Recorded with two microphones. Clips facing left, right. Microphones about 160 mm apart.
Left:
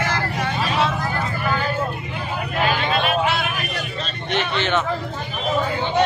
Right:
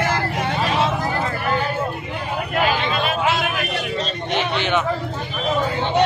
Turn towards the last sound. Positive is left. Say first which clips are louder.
# right 1 dB
turn(degrees=-15)  # may be behind; listen again after turning